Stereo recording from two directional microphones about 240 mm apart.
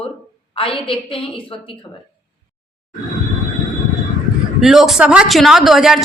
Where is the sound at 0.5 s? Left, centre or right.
Left.